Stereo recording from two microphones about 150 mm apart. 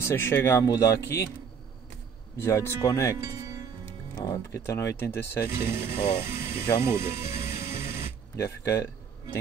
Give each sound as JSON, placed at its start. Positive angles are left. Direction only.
{"t": 0.0, "sound": "speech", "side_deg": 15}
{"t": 2.4, "sound": "speech", "side_deg": 15}
{"t": 5.6, "sound": "speech", "side_deg": -15}